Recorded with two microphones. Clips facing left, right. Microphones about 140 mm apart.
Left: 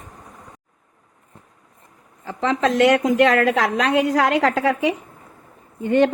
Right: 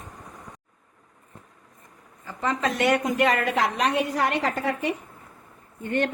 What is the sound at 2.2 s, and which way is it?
A woman's voice, 90° left.